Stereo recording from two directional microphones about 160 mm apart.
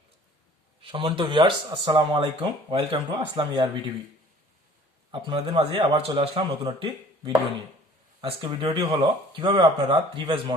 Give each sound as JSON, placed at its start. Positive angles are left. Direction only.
{"t": 0.8, "sound": "speech", "side_deg": -35}
{"t": 5.1, "sound": "speech", "side_deg": -35}
{"t": 8.2, "sound": "speech", "side_deg": -30}